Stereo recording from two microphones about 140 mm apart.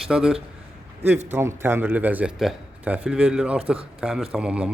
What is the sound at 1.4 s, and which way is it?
A man's voice, 15° right (ahead or behind).